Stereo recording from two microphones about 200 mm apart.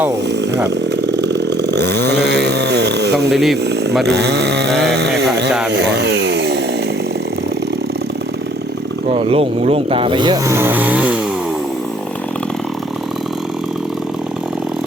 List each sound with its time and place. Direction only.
0.7 s chainsaw: 60° right (ahead or behind)
3.2 s speech: centre (ahead or behind)
4.0 s a sound: 60° right (ahead or behind)
4.7 s a sound: centre (ahead or behind)
5.7 s speech: 60° right (ahead or behind)
9.1 s speech: 30° right (ahead or behind); by 11.2 s 5° right (ahead or behind)